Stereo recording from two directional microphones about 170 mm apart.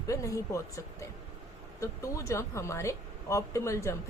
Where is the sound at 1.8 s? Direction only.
20° left (ahead or behind).